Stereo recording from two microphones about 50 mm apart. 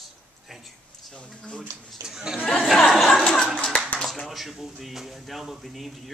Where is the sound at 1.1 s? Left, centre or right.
Left.